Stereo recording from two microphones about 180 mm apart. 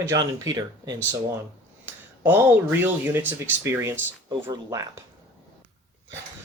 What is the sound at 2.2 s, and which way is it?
Speech, 10° right (ahead or behind).